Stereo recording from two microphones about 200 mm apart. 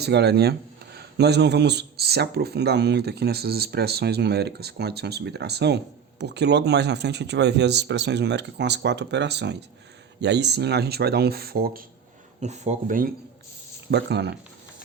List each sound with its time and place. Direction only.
0.0 s speech: 55° right (ahead or behind)
12.4 s speech: 35° right (ahead or behind)
13.9 s speech: 55° right (ahead or behind)